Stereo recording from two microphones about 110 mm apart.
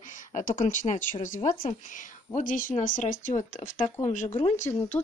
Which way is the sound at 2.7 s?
90° left.